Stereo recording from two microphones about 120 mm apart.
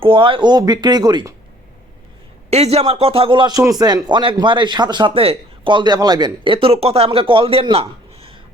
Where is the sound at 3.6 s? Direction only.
30° right (ahead or behind).